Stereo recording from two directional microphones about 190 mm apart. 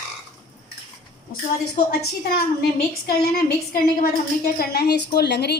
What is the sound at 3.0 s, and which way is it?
A woman's voice, 55° left (ahead or behind).